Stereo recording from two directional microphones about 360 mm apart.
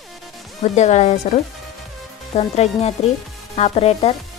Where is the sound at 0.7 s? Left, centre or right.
Centre.